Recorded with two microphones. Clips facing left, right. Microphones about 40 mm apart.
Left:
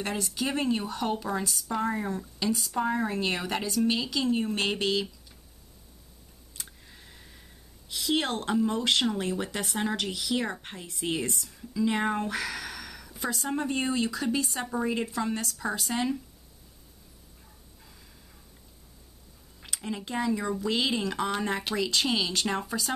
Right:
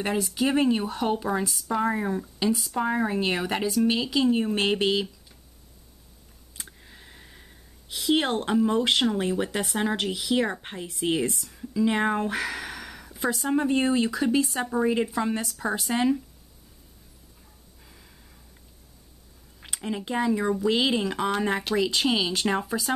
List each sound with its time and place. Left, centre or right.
0.0 s speech: centre
2.5 s speech: centre
2.9 s speech: centre
6.5 s speech: centre
17.8 s gasp: centre
19.6 s speech: centre